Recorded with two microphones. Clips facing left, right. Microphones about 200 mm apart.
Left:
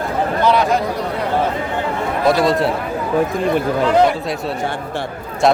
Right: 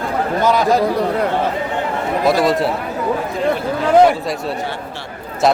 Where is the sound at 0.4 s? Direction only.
40° right (ahead or behind).